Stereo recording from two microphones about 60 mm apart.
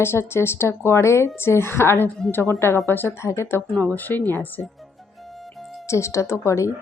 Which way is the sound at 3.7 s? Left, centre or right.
Left.